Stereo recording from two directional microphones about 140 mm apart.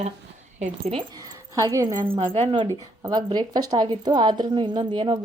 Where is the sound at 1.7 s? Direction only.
25° right (ahead or behind).